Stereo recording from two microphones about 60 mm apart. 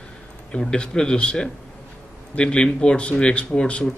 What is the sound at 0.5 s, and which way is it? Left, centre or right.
A man's voice, centre.